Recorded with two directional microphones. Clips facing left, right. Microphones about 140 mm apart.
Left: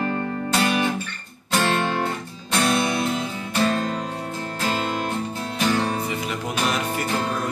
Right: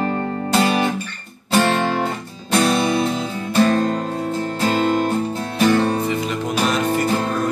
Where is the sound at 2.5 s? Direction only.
25° right (ahead or behind).